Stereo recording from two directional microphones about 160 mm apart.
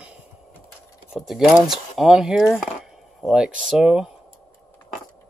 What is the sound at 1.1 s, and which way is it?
Speech, centre (ahead or behind).